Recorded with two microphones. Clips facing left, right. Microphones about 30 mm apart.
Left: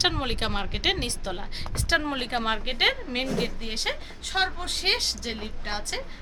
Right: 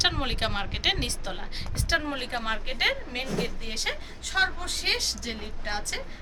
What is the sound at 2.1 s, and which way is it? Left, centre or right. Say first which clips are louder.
Speech: left 3 dB; left.